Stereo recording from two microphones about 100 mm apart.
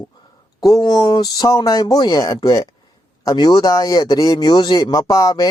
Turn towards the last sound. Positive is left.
turn(degrees=35)  # may be behind; listen again after turning